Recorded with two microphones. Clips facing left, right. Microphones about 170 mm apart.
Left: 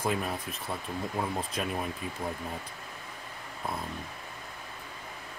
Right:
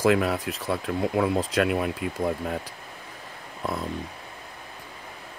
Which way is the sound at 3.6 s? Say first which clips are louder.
Right 6 dB; 90° right.